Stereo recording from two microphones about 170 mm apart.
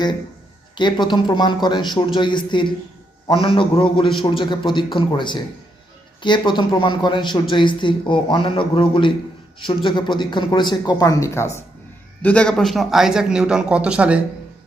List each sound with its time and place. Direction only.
0.8 s a man's voice: 25° left (ahead or behind)
12.2 s speech: 5° left (ahead or behind)